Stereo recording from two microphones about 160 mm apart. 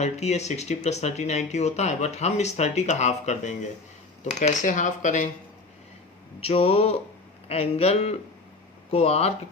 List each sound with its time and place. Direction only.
0.0 s speech: 45° left (ahead or behind)
6.4 s speech: 40° left (ahead or behind)